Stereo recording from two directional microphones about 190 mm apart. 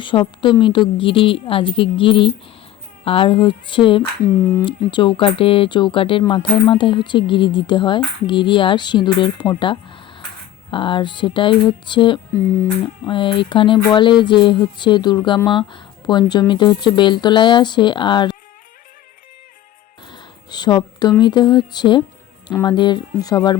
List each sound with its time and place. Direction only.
0.0 s speech: 25° left (ahead or behind)
20.1 s speech: 25° left (ahead or behind)